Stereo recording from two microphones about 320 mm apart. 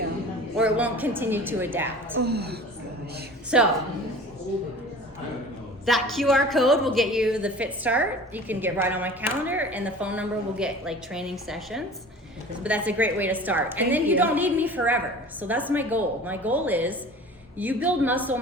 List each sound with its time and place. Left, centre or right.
0.5 s a woman's voice: centre
2.2 s a woman's voice: right
3.5 s a woman's voice: centre
5.8 s a woman's voice: centre